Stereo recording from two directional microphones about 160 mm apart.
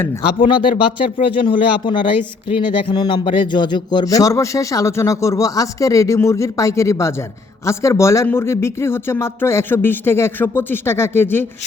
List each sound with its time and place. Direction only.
0.4 s speech: 30° left (ahead or behind); by 11.4 s 15° left (ahead or behind)